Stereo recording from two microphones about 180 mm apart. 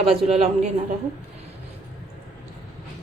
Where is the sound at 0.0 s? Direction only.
35° right (ahead or behind).